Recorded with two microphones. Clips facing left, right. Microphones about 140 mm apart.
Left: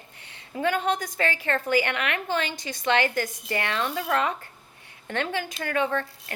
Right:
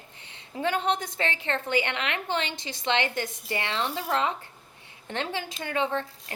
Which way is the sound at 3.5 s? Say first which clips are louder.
Left 2 dB; 25° right (ahead or behind).